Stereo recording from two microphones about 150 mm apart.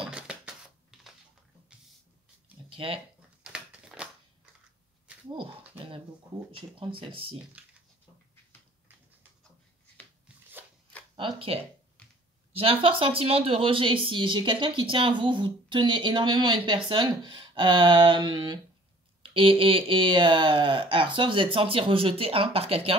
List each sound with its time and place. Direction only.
0.1 s typewriter: 5° right (ahead or behind)
2.7 s speech: 35° right (ahead or behind)
3.5 s a sound: 5° right (ahead or behind)
7.0 s speech: 35° right (ahead or behind)
11.3 s speech: 40° right (ahead or behind)
12.8 s speech: 35° right (ahead or behind)